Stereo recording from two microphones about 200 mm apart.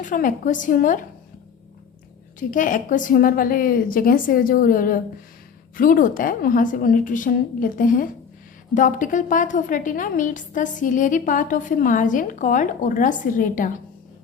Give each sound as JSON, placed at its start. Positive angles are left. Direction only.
{"t": 0.0, "sound": "a woman's voice", "side_deg": 40}
{"t": 2.5, "sound": "a woman's voice", "side_deg": 40}